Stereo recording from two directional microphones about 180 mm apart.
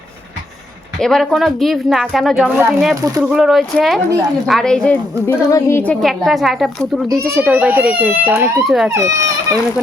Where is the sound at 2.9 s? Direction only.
20° right (ahead or behind).